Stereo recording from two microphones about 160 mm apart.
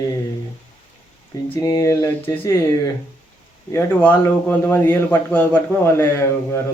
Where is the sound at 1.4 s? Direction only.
10° left (ahead or behind).